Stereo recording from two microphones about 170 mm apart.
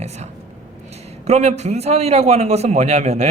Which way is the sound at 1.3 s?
40° right (ahead or behind).